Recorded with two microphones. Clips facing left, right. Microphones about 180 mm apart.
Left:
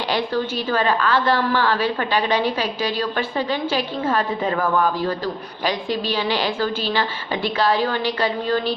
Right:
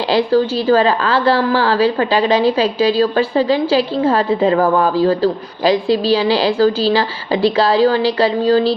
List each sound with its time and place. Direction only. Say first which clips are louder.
0.1 s a woman's voice: right 10 dB; 35° right (ahead or behind)
2.1 s a woman's voice: right 5 dB; 90° right
3.0 s a woman's voice: right 9 dB; 35° right (ahead or behind)